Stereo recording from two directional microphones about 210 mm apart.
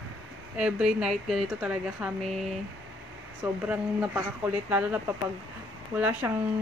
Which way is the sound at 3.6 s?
5° right (ahead or behind).